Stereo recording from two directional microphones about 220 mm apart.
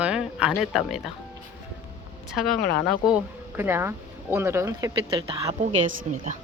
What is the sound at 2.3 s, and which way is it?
Speech, centre (ahead or behind).